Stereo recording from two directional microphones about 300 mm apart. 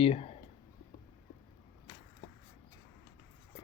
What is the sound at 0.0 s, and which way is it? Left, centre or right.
Speech, centre.